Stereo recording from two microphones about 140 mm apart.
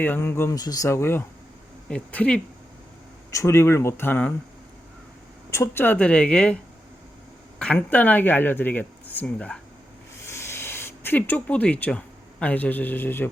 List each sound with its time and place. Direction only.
0.0 s speech: 15° left (ahead or behind)
1.9 s speech: 10° left (ahead or behind)
3.3 s speech: 20° left (ahead or behind)
5.5 s speech: 15° left (ahead or behind)
7.6 s speech: 10° left (ahead or behind)